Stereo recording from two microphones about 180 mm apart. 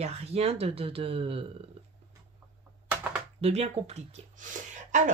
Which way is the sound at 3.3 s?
35° right (ahead or behind).